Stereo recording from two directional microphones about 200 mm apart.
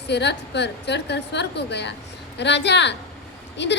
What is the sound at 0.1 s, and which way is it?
A woman's voice, 60° left (ahead or behind).